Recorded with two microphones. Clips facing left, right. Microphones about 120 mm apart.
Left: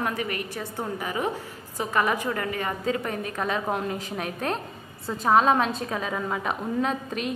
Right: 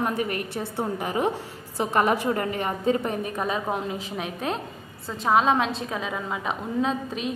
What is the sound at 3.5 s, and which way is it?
A woman's voice, 5° right (ahead or behind).